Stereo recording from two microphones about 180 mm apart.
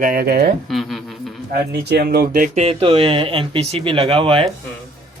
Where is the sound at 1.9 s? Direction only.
65° right (ahead or behind).